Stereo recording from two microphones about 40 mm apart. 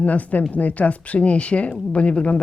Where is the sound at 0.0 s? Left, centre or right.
Left.